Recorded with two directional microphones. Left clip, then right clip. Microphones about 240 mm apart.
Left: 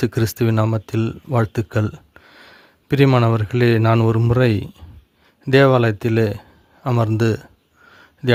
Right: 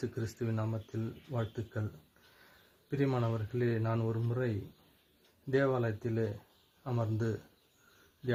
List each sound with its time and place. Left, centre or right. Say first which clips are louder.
0.0 s speech: left 18 dB; left
2.9 s speech: left 18 dB; left